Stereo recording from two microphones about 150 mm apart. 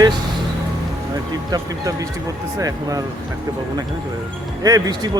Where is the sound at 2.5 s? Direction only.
25° right (ahead or behind).